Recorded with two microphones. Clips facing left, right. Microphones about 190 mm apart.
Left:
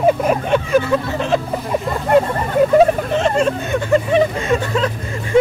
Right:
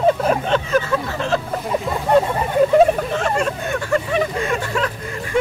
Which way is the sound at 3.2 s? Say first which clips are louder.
Left 4 dB; 20° left (ahead or behind).